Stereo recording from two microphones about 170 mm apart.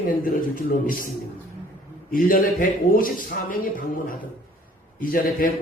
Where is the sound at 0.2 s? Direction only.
55° left (ahead or behind).